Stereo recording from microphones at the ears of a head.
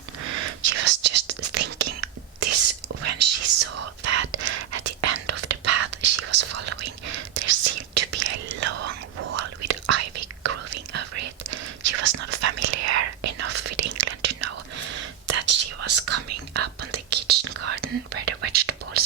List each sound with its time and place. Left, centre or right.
0.3 s whispering: right